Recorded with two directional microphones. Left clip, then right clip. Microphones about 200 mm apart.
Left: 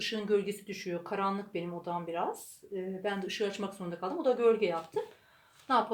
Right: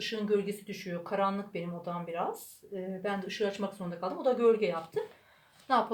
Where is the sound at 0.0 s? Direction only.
30° left (ahead or behind).